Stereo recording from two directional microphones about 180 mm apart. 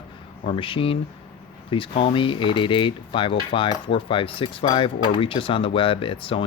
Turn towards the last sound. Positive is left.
turn(degrees=30)  # may be behind; listen again after turning